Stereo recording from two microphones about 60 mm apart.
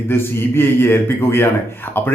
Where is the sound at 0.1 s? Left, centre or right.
Left.